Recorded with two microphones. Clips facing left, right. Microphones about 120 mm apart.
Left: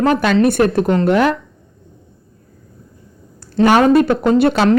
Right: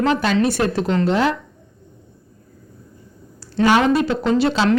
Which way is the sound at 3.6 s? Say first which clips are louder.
Left 5 dB; 50° left (ahead or behind).